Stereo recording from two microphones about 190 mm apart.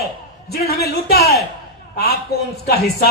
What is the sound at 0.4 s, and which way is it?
Speech, 55° left (ahead or behind).